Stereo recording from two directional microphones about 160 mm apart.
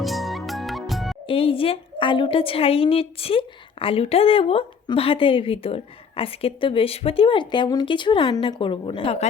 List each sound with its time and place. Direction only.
0.0 s music: centre (ahead or behind)
1.3 s a woman's voice: 35° left (ahead or behind)